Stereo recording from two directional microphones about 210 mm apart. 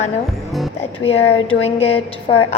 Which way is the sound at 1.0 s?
30° left (ahead or behind).